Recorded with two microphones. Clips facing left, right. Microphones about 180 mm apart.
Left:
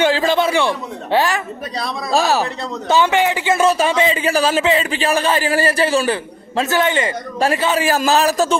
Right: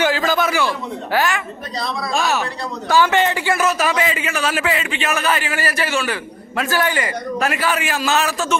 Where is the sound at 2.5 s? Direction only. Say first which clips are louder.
Left 1 dB; 20° left (ahead or behind).